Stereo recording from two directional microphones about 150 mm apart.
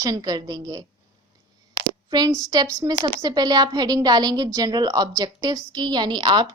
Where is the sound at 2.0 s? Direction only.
25° right (ahead or behind).